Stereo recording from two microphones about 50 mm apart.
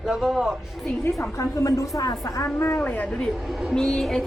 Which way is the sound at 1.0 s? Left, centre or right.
Left.